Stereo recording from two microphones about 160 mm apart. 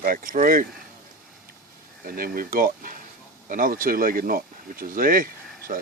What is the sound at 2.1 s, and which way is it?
Speech, 65° right (ahead or behind).